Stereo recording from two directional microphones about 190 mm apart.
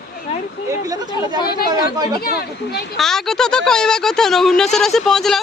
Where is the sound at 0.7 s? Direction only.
20° right (ahead or behind).